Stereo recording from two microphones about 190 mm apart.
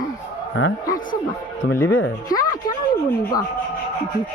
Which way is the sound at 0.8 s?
45° left (ahead or behind).